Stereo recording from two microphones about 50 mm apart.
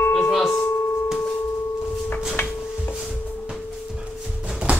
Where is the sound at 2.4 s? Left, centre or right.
Left.